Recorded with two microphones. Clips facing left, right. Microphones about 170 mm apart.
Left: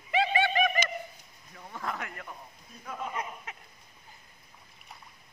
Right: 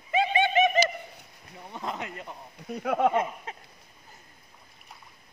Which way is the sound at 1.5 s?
20° right (ahead or behind).